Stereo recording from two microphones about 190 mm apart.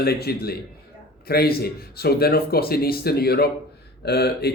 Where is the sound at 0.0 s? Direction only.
55° left (ahead or behind).